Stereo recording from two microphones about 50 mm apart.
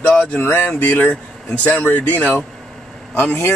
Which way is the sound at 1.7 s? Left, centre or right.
Left.